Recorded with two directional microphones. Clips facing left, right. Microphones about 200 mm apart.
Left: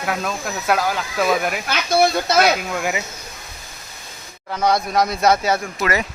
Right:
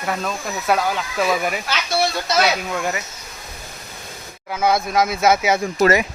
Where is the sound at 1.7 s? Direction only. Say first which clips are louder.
Left 8 dB; 50° left (ahead or behind).